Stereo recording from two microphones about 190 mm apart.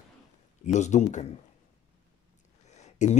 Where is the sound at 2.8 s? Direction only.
35° left (ahead or behind).